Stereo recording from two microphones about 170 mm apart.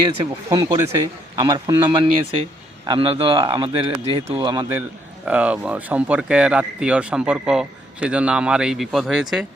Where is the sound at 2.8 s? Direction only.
30° right (ahead or behind).